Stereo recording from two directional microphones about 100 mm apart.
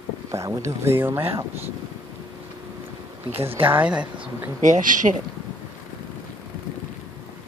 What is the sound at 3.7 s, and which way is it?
Speech, 10° right (ahead or behind).